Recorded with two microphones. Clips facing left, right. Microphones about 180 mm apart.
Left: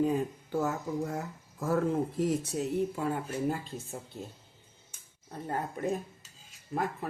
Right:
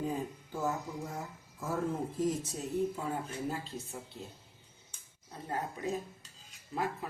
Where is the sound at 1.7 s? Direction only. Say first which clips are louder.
Left 6 dB; 65° left (ahead or behind).